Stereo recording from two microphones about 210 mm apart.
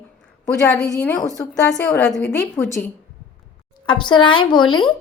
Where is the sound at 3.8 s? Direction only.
25° left (ahead or behind).